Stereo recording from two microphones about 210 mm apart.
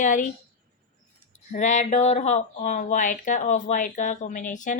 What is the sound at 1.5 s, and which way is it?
Speech, 35° left (ahead or behind).